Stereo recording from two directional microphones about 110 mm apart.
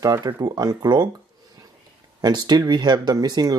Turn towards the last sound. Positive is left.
turn(degrees=-35)  # may be behind; listen again after turning